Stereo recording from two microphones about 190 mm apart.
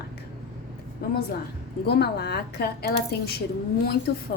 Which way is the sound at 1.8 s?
60° left (ahead or behind).